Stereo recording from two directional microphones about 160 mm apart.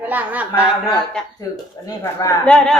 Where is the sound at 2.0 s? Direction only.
20° left (ahead or behind).